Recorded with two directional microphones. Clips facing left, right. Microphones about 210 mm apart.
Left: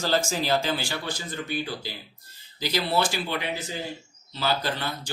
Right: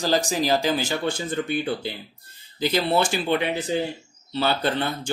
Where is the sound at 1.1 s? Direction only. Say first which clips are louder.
Right 6 dB; 55° right (ahead or behind).